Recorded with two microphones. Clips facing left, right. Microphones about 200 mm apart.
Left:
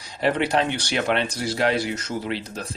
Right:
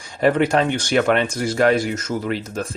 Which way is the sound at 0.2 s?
45° right (ahead or behind).